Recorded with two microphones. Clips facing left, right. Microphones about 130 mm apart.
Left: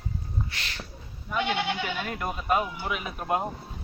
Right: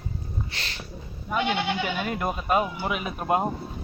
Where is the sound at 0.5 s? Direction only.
30° right (ahead or behind).